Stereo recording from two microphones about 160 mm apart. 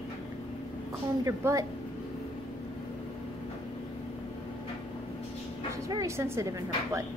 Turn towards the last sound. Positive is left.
turn(degrees=-20)  # may be behind; listen again after turning